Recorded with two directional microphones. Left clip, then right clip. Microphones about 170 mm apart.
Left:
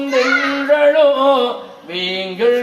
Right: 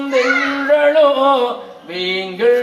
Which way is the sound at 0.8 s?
25° left (ahead or behind).